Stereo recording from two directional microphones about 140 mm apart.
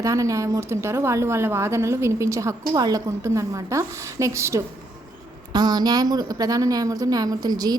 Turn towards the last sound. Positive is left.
turn(degrees=-30)  # may be behind; listen again after turning